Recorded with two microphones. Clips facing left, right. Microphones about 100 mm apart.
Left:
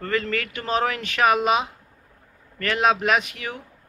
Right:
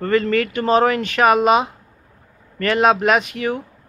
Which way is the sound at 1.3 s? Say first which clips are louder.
Right 8 dB; 50° right (ahead or behind).